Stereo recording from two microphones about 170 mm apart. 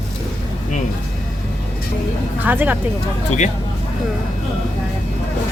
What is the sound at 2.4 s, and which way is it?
Speech, 10° right (ahead or behind).